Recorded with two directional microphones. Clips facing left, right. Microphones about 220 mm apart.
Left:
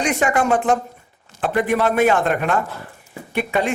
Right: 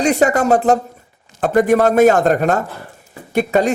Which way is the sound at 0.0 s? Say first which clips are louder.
Right 5 dB; 40° right (ahead or behind).